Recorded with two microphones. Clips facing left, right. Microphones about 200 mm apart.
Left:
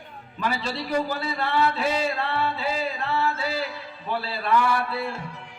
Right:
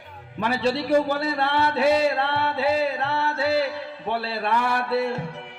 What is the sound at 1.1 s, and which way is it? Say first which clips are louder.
Music: right 2 dB; 65° right (ahead or behind).